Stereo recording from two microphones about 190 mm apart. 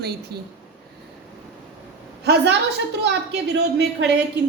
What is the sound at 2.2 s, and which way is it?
Speech, 60° right (ahead or behind).